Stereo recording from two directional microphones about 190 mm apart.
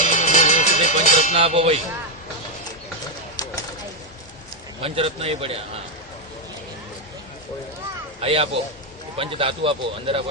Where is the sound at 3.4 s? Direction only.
20° left (ahead or behind).